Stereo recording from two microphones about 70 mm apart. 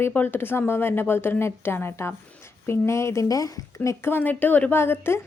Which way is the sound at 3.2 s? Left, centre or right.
Left.